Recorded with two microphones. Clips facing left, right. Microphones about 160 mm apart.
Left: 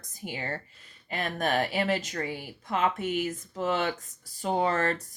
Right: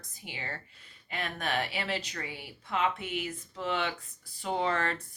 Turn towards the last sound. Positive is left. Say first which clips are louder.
# left 4 dB
turn(degrees=40)  # may be behind; listen again after turning